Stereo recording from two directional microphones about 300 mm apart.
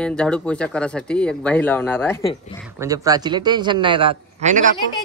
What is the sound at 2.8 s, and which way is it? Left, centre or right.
A man's voice, centre.